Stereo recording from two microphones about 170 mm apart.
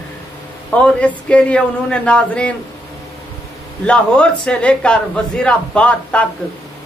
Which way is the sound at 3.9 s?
5° left (ahead or behind).